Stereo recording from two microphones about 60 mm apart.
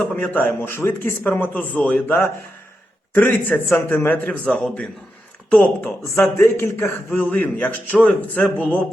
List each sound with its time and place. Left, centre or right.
0.0 s a man's voice: left
0.6 s a man's voice: left
1.5 s a man's voice: left
3.2 s a man's voice: left
4.6 s a man's voice: centre
5.6 s a man's voice: left
6.4 s speech: left
7.2 s a man's voice: left